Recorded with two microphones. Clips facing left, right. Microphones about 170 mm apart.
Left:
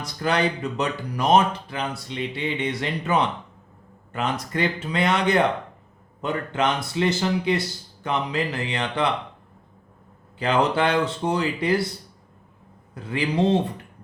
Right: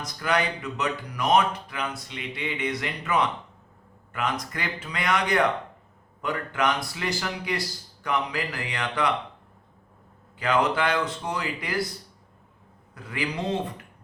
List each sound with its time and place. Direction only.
0.0 s speech: 30° left (ahead or behind)
10.3 s speech: 30° left (ahead or behind)
12.9 s speech: 30° left (ahead or behind)